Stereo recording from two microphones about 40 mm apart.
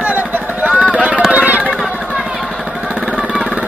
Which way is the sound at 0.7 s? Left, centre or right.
Right.